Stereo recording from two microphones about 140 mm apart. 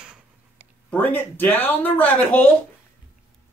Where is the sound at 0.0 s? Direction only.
5° right (ahead or behind).